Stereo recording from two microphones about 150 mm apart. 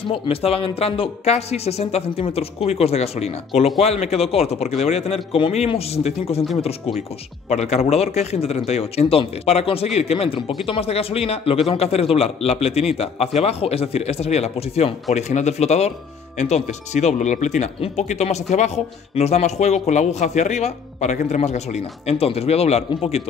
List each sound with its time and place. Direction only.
0.1 s a man's voice: 40° left (ahead or behind)
7.4 s a man's voice: 50° left (ahead or behind)